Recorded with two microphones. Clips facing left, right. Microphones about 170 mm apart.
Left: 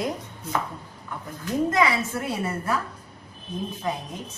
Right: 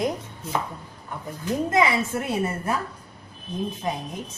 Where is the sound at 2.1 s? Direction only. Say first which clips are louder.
Right 2 dB; 20° right (ahead or behind).